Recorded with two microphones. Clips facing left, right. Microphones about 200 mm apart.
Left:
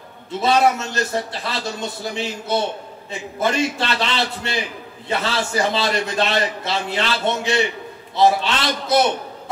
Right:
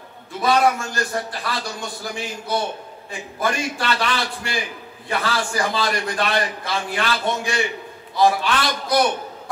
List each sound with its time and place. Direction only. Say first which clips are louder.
0.3 s a man's voice: left 1 dB; 25° left (ahead or behind)